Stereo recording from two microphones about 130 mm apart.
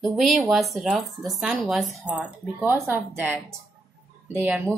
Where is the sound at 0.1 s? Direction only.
Centre (ahead or behind).